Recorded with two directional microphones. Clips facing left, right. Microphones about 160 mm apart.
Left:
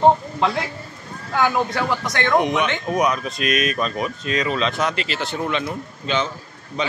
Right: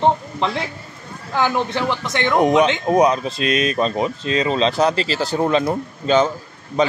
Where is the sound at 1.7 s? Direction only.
25° right (ahead or behind).